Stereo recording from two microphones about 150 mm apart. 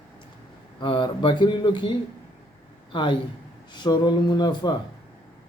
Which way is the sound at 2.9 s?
35° left (ahead or behind).